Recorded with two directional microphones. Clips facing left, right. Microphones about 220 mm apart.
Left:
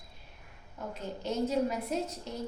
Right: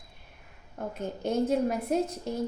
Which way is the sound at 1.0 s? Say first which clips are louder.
Right 4 dB; 50° right (ahead or behind).